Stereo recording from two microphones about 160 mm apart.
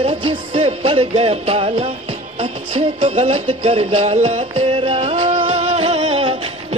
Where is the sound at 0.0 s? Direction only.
30° right (ahead or behind).